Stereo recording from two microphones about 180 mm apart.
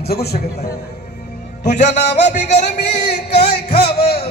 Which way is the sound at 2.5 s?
70° left (ahead or behind).